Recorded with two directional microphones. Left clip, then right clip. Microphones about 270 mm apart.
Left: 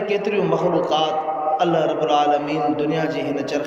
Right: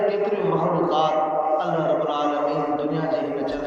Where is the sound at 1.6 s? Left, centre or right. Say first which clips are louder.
Left 3 dB; left.